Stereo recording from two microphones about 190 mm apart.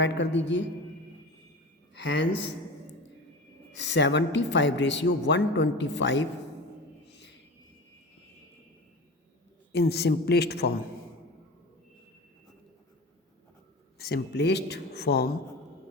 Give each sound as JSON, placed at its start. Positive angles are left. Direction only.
{"t": 0.0, "sound": "a woman's voice", "side_deg": 70}
{"t": 2.0, "sound": "a woman's voice", "side_deg": 70}
{"t": 3.8, "sound": "a woman's voice", "side_deg": 65}
{"t": 9.7, "sound": "speech", "side_deg": 60}
{"t": 14.0, "sound": "speech", "side_deg": 60}